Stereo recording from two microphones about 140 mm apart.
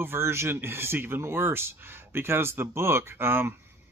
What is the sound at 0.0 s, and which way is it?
Speech, 15° right (ahead or behind).